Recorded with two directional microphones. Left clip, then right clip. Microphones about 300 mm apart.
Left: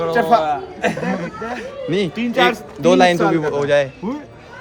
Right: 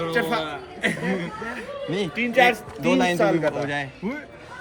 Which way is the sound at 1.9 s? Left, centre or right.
Centre.